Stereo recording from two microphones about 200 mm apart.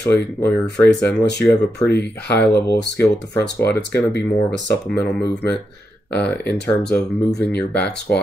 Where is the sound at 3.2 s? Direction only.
60° left (ahead or behind).